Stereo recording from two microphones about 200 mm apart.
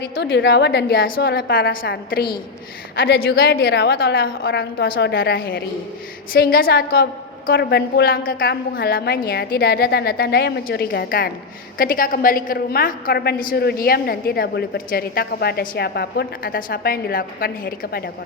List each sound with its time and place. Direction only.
0.0 s a woman's voice: 55° left (ahead or behind)